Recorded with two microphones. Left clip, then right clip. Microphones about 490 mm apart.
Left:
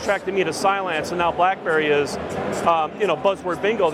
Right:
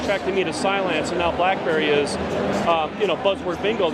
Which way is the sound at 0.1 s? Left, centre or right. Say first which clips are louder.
Left 2 dB; left.